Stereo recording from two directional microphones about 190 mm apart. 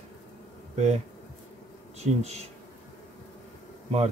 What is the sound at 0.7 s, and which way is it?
Speech, 35° right (ahead or behind).